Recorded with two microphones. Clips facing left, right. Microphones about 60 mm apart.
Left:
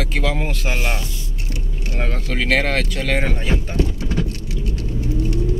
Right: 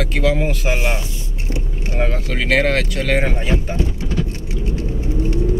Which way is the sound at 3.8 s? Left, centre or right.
Right.